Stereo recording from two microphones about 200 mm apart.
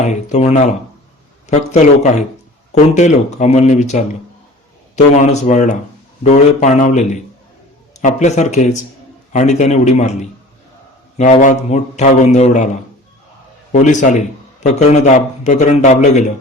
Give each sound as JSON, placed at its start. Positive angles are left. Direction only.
{"t": 0.0, "sound": "a man's voice", "side_deg": 35}
{"t": 13.7, "sound": "a man's voice", "side_deg": 40}